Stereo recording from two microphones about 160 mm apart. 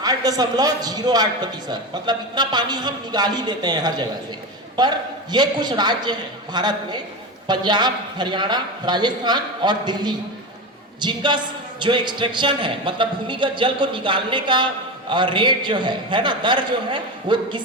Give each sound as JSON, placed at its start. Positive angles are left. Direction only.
{"t": 0.0, "sound": "a man's voice", "side_deg": -25}